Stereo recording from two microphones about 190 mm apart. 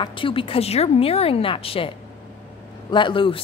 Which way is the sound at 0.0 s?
25° left (ahead or behind).